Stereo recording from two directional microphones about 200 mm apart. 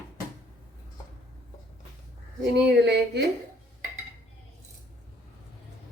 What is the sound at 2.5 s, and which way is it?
Speech, 55° right (ahead or behind).